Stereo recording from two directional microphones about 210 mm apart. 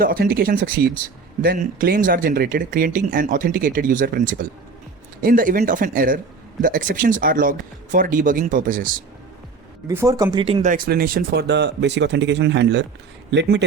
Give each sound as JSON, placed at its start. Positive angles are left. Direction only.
{"t": 0.0, "sound": "speech", "side_deg": -45}
{"t": 9.8, "sound": "speech", "side_deg": -15}